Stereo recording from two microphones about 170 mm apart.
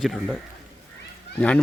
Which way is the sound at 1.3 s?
5° left (ahead or behind).